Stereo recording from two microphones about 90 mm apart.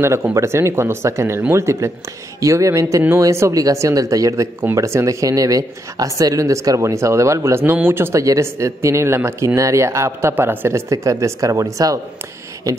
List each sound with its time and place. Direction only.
0.0 s speech: 30° right (ahead or behind)
10.9 s speech: 35° right (ahead or behind)